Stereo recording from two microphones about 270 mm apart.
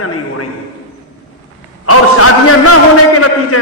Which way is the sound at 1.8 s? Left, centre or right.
Left.